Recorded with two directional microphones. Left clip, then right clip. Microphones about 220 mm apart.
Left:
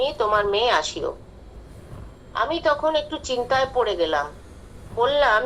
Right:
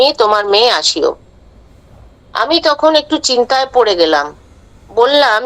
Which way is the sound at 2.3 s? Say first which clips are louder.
Right 9 dB; 50° right (ahead or behind).